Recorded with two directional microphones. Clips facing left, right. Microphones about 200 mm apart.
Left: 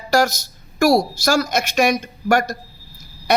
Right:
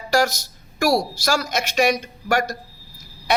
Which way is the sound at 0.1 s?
45° left (ahead or behind).